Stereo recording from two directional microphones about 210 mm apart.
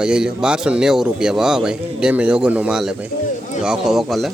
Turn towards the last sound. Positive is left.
turn(degrees=0)  # may be behind; listen again after turning